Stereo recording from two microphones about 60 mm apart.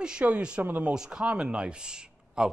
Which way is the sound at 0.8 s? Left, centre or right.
Centre.